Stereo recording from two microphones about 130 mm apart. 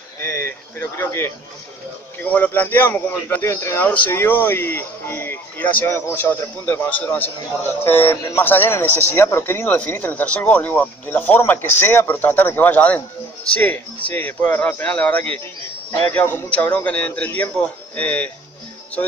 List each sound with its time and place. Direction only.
0.2 s speech: 15° left (ahead or behind)